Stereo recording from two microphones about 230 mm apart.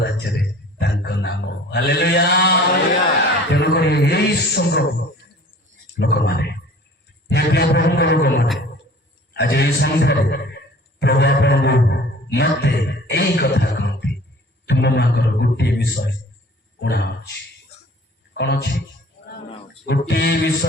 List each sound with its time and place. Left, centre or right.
0.0 s a man's voice: left
6.0 s a man's voice: left
18.3 s a man's voice: left
19.8 s a man's voice: left